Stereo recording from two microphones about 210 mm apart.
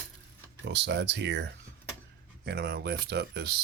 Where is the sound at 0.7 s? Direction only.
55° right (ahead or behind).